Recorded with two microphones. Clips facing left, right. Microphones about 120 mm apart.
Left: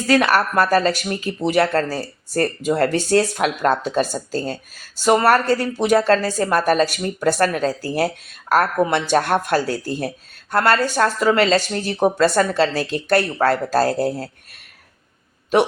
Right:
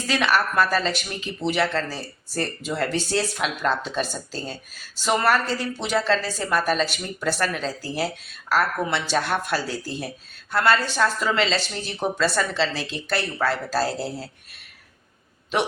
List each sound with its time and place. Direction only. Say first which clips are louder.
0.2 s speech: left 4 dB; 45° left (ahead or behind)